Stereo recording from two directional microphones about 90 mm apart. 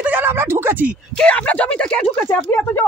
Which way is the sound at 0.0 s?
20° right (ahead or behind).